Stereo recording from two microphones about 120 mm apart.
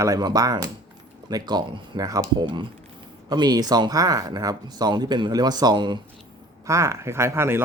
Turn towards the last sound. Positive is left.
turn(degrees=-20)  # may be behind; listen again after turning